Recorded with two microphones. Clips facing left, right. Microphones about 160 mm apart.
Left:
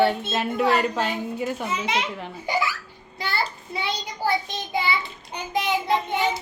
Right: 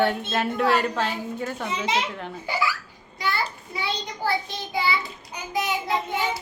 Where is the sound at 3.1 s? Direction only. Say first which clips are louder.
Even; 30° left (ahead or behind).